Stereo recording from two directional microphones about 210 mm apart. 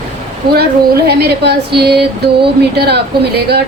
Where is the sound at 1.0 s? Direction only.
50° right (ahead or behind).